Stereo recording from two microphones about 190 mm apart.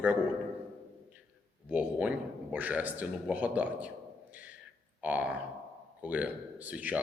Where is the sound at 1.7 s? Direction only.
10° right (ahead or behind).